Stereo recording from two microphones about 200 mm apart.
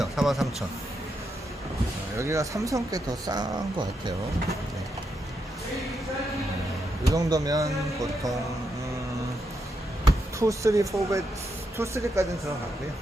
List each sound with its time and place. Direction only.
0.0 s a sound: centre (ahead or behind)
2.1 s speech: 15° right (ahead or behind)
7.0 s speech: 15° right (ahead or behind)
10.1 s speech: 15° right (ahead or behind)